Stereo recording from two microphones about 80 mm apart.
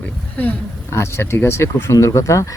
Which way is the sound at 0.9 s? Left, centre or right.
Left.